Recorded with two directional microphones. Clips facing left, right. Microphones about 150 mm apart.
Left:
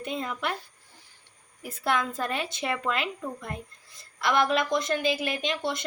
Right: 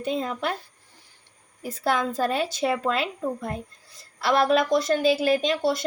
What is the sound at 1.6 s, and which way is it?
A woman's voice, 35° right (ahead or behind).